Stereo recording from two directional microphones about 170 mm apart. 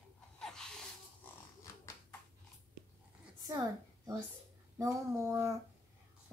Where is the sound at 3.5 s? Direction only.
20° right (ahead or behind).